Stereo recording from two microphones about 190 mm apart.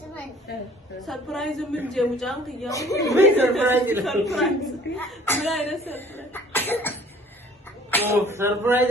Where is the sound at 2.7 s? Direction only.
15° left (ahead or behind).